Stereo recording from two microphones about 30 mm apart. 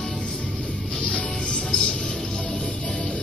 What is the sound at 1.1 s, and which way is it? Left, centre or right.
Music, left.